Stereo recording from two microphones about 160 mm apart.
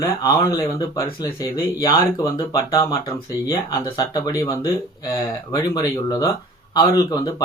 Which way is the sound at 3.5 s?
30° left (ahead or behind).